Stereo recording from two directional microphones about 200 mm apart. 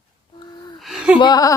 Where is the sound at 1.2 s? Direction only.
20° left (ahead or behind).